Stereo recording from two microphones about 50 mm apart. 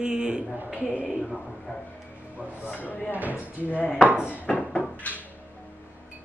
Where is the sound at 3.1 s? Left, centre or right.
Right.